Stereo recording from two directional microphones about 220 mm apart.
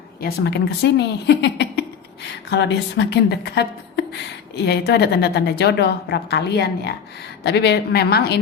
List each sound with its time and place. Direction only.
0.2 s a woman's voice: 45° left (ahead or behind)